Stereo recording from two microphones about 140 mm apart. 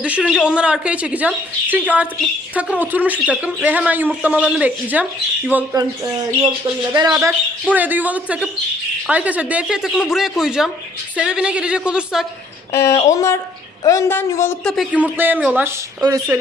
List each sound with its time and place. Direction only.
0.0 s speech: 5° right (ahead or behind)
6.9 s speech: 25° right (ahead or behind)
7.7 s speech: 10° right (ahead or behind)
12.7 s speech: 20° left (ahead or behind)
14.6 s speech: 5° left (ahead or behind)
14.9 s speech: 10° right (ahead or behind)
16.0 s speech: 25° right (ahead or behind)